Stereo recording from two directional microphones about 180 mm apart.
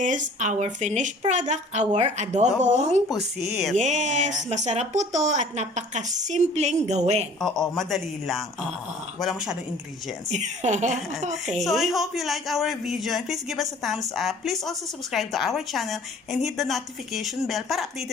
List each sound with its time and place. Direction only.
0.0 s a woman's voice: 45° right (ahead or behind)
3.2 s a man's voice: centre (ahead or behind)
3.8 s a woman's voice: 40° right (ahead or behind)
7.3 s a man's voice: 5° left (ahead or behind)
10.2 s a woman's voice: 40° right (ahead or behind)
11.6 s a man's voice: centre (ahead or behind)